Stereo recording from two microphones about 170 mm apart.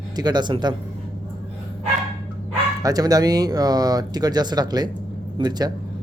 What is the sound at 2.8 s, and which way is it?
A man's voice, 20° right (ahead or behind).